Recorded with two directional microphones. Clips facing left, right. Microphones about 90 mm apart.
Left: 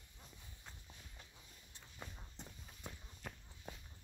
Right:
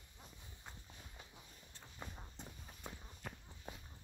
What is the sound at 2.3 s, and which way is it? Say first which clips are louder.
Walk: right 2 dB; 5° right (ahead or behind).